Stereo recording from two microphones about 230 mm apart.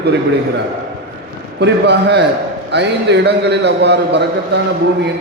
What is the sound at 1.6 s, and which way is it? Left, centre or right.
A man's voice, right.